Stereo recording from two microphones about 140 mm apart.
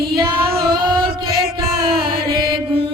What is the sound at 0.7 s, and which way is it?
Music, 35° right (ahead or behind).